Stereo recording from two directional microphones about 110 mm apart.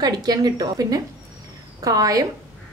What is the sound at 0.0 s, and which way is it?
Speech, 35° right (ahead or behind).